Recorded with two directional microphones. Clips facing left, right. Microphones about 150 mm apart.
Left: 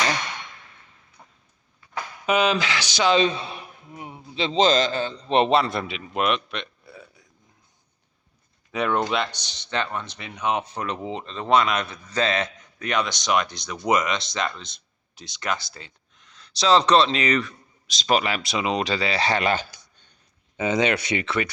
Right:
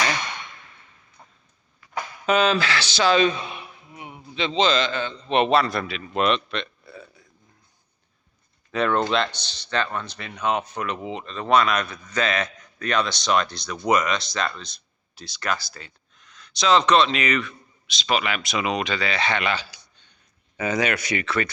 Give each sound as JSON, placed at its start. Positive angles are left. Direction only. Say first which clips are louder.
{"t": 2.2, "sound": "speech", "louder": "right 1 dB", "side_deg": 15}
{"t": 4.1, "sound": "a man's voice", "louder": "left 1 dB", "side_deg": 30}
{"t": 6.1, "sound": "a sound", "louder": "right 2 dB", "side_deg": 10}
{"t": 8.7, "sound": "speech", "louder": "right 2 dB", "side_deg": 15}
{"t": 20.6, "sound": "speech", "louder": "left 2 dB", "side_deg": 20}